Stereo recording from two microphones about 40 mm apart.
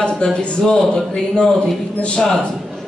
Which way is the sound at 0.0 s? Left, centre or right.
Left.